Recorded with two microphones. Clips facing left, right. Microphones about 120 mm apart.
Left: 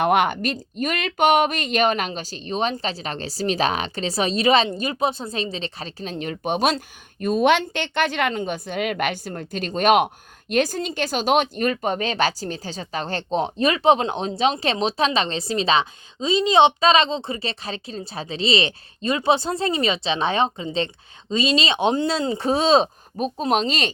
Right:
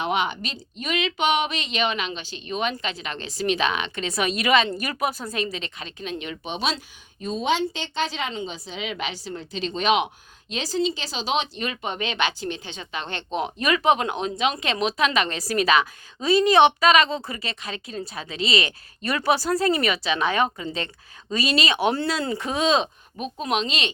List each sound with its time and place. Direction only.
0.0 s speech: 50° left (ahead or behind)